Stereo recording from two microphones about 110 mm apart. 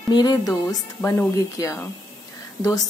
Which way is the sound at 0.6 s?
25° left (ahead or behind).